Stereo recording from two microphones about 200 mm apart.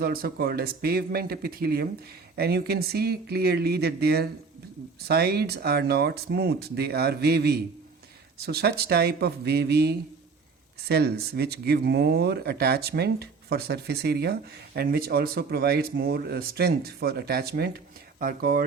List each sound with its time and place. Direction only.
0.0 s speech: 50° right (ahead or behind)